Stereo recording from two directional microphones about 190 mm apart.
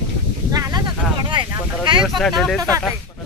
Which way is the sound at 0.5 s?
20° right (ahead or behind).